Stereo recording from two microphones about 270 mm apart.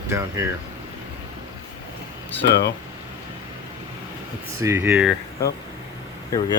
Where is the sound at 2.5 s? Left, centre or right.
Left.